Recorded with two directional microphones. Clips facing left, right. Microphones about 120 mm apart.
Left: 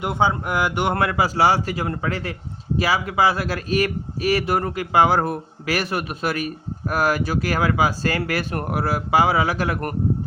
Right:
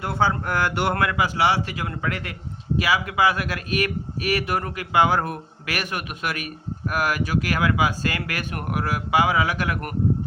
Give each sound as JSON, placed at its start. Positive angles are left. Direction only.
{"t": 0.0, "sound": "speech", "side_deg": 15}
{"t": 0.9, "sound": "a man's voice", "side_deg": 30}